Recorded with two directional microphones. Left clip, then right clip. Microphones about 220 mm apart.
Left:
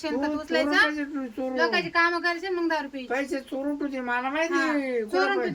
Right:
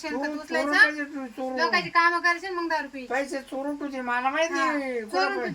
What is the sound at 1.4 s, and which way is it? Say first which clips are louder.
A man's voice: even; 15° left (ahead or behind).